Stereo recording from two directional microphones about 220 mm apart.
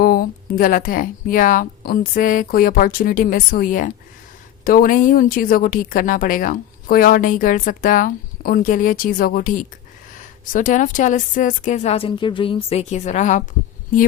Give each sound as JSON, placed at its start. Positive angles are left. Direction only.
{"t": 0.0, "sound": "a woman's voice", "side_deg": 40}